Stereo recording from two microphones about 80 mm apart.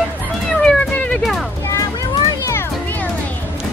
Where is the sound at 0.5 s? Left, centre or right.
Centre.